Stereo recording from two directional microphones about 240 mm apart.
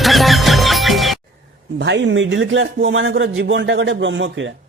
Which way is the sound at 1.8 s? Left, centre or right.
Right.